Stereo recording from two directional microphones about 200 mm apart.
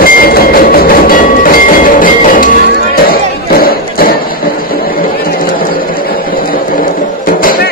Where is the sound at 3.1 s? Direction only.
45° left (ahead or behind).